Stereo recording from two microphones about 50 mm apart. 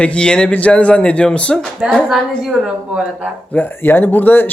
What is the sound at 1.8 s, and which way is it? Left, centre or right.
Speech, right.